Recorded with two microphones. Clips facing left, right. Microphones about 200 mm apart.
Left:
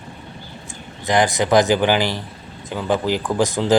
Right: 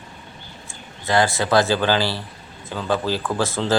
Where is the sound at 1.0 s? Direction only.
20° left (ahead or behind).